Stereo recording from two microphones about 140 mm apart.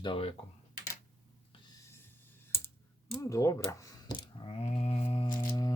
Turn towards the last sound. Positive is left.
turn(degrees=25)  # may be behind; listen again after turning